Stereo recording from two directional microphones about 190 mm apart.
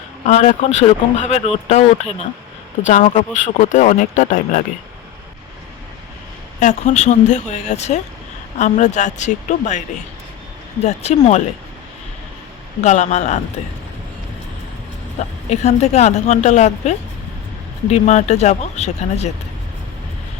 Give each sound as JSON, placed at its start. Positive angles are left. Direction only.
{"t": 0.3, "sound": "speech", "side_deg": 40}
{"t": 6.6, "sound": "speech", "side_deg": 40}
{"t": 10.8, "sound": "speech", "side_deg": 35}
{"t": 12.8, "sound": "speech", "side_deg": 40}
{"t": 15.4, "sound": "speech", "side_deg": 35}